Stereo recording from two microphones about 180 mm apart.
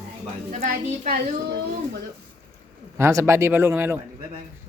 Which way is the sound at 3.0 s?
15° right (ahead or behind).